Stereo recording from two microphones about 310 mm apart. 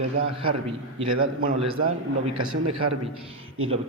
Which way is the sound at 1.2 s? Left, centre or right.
Right.